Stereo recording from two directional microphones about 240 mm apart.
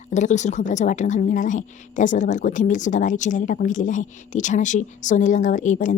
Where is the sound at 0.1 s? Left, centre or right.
Left.